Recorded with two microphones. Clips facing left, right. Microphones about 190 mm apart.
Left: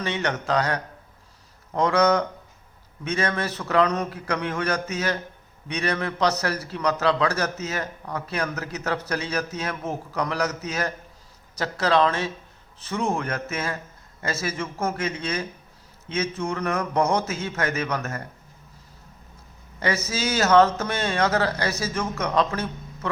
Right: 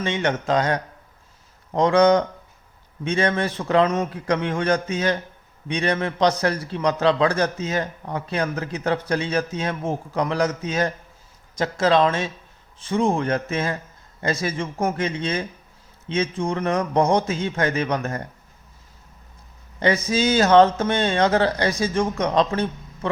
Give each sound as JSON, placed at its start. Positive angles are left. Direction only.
{"t": 0.0, "sound": "a man's voice", "side_deg": -25}
{"t": 14.9, "sound": "a man's voice", "side_deg": -30}
{"t": 19.8, "sound": "a man's voice", "side_deg": -30}